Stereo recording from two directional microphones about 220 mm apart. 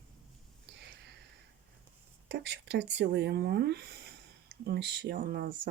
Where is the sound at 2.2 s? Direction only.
50° right (ahead or behind).